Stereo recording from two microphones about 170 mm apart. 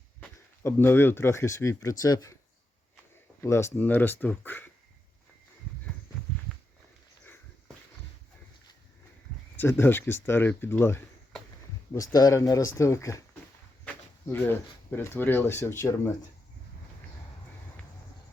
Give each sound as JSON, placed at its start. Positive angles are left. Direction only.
{"t": 0.2, "sound": "speech", "side_deg": 15}
{"t": 3.4, "sound": "speech", "side_deg": 15}
{"t": 9.6, "sound": "speech", "side_deg": 15}
{"t": 11.9, "sound": "speech", "side_deg": 20}